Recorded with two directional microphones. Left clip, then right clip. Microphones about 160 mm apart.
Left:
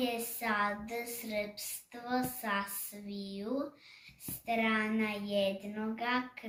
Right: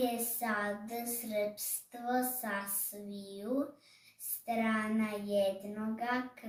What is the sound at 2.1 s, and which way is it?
Child singing, 10° right (ahead or behind).